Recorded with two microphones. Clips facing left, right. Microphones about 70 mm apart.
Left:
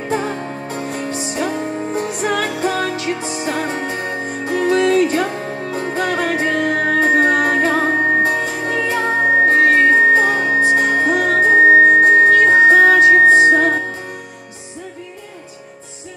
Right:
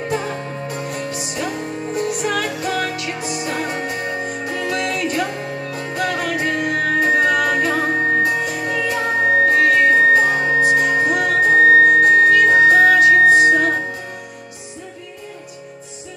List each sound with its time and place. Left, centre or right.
0.1 s music: left